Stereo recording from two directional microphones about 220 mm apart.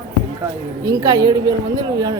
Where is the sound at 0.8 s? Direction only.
15° right (ahead or behind).